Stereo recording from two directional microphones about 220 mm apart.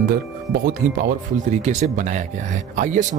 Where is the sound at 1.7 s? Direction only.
35° right (ahead or behind).